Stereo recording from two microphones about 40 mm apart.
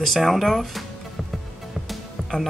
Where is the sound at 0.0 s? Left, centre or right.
Centre.